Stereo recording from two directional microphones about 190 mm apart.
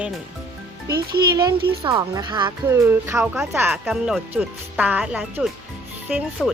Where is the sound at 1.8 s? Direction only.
20° right (ahead or behind).